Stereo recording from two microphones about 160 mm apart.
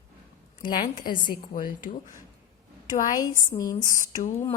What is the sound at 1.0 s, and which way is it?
A woman's voice, 60° left (ahead or behind).